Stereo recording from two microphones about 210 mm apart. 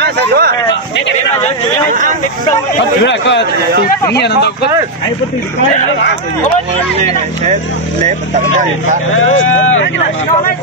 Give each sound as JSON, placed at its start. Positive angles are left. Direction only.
{"t": 0.0, "sound": "speech", "side_deg": -50}
{"t": 1.9, "sound": "speech", "side_deg": -35}
{"t": 3.1, "sound": "a man's voice", "side_deg": 60}
{"t": 9.1, "sound": "speech", "side_deg": 70}